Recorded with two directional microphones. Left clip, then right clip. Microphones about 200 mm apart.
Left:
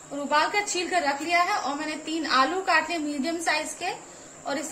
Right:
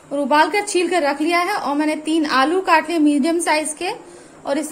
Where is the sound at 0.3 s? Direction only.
55° right (ahead or behind).